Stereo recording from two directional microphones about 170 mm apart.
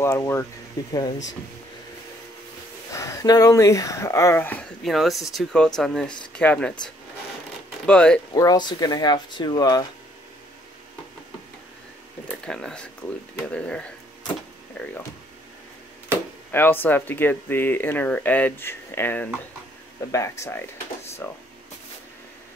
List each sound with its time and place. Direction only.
0.0 s speech: 15° left (ahead or behind)
2.9 s speech: 20° left (ahead or behind)
4.8 s speech: centre (ahead or behind)
7.8 s speech: 5° left (ahead or behind)
8.4 s speech: 25° left (ahead or behind)
12.4 s speech: 5° left (ahead or behind)
16.5 s speech: 10° left (ahead or behind)